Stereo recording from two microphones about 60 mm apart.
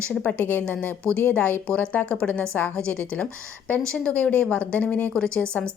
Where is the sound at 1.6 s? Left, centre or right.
Left.